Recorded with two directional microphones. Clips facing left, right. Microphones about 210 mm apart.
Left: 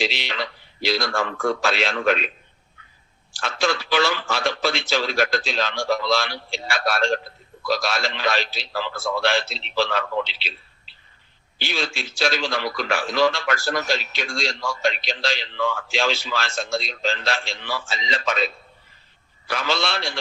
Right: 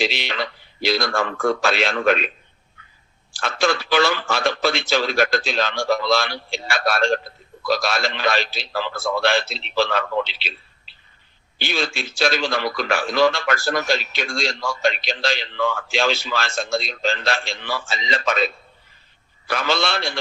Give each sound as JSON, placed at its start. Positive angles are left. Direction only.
{"t": 0.0, "sound": "a man's voice", "side_deg": -55}
{"t": 3.4, "sound": "a man's voice", "side_deg": -55}